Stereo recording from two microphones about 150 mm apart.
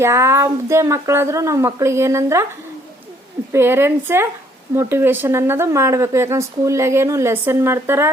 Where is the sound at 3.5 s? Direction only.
15° right (ahead or behind).